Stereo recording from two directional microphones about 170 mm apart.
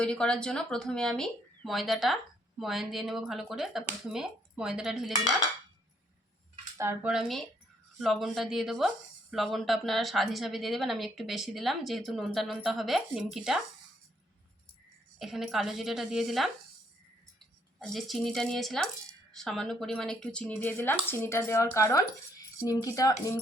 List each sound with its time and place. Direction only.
0.0 s a woman's voice: 5° left (ahead or behind)
6.7 s speech: 15° right (ahead or behind)
7.1 s a woman's voice: centre (ahead or behind)
15.2 s a woman's voice: centre (ahead or behind)
17.7 s a woman's voice: centre (ahead or behind); by 23.1 s 20° left (ahead or behind)